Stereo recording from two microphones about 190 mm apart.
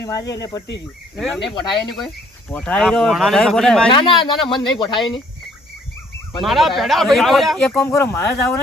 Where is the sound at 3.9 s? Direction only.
25° left (ahead or behind).